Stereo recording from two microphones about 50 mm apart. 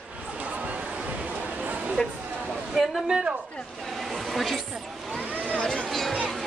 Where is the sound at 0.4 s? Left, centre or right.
Right.